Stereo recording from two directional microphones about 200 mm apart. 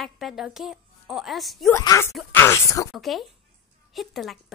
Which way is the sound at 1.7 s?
15° left (ahead or behind).